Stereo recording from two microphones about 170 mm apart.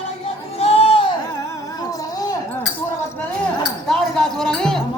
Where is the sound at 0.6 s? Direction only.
35° left (ahead or behind).